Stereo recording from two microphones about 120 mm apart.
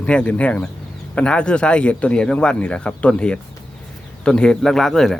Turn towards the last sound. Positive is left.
turn(degrees=5)  # may be behind; listen again after turning